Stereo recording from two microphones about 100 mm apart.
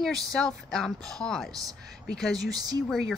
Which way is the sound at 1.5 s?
35° right (ahead or behind).